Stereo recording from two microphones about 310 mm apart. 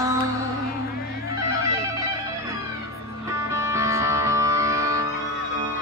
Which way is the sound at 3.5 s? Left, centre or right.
Centre.